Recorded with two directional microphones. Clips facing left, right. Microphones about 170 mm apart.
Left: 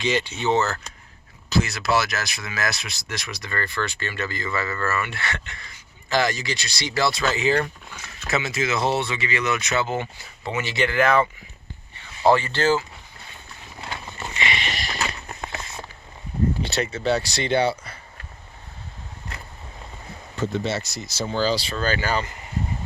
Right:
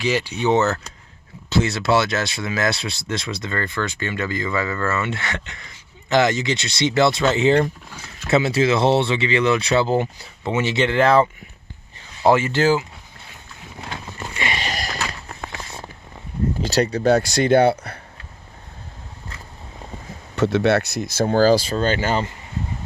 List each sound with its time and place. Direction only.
0.0 s speech: 10° right (ahead or behind); by 10.1 s 35° right (ahead or behind)
10.4 s speech: 20° right (ahead or behind)
12.2 s speech: 5° right (ahead or behind)
14.3 s a sound: 45° right (ahead or behind)
16.6 s speech: 40° right (ahead or behind); by 18.0 s 60° right (ahead or behind)
20.3 s speech: 75° right (ahead or behind); by 21.8 s 45° right (ahead or behind)
21.8 s speech: 25° right (ahead or behind)